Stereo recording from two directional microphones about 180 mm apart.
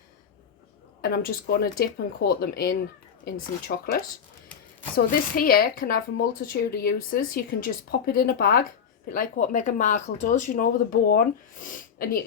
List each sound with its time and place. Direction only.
1.0 s a woman's voice: 60° left (ahead or behind)
4.9 s a woman's voice: 55° left (ahead or behind)